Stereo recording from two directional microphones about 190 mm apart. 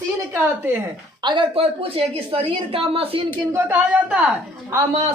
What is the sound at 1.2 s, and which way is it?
Speech, 25° right (ahead or behind).